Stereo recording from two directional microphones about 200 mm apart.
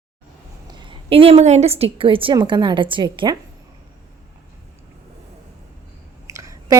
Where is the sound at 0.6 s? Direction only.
25° right (ahead or behind).